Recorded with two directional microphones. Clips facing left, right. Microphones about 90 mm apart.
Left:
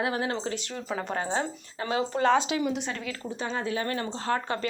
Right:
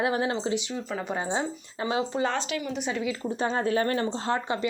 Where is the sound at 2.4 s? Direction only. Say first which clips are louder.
Left 4 dB; 20° left (ahead or behind).